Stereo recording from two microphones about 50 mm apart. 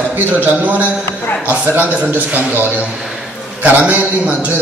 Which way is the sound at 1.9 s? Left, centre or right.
Right.